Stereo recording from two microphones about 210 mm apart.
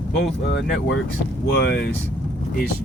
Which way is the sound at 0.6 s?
55° left (ahead or behind).